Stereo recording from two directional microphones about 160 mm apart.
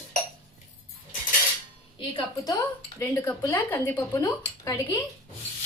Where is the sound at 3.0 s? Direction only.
10° left (ahead or behind).